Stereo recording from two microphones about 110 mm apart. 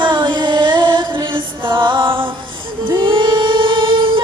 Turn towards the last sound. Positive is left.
turn(degrees=-50)  # may be behind; listen again after turning